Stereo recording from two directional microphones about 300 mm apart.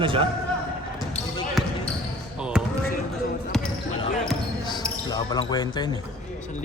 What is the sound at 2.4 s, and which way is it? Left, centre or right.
Basketball bounce, centre.